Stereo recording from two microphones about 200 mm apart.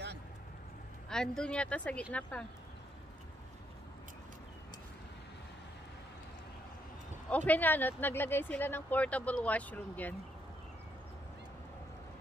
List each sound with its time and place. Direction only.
1.0 s a woman's voice: 5° left (ahead or behind)
7.2 s speech: 10° left (ahead or behind)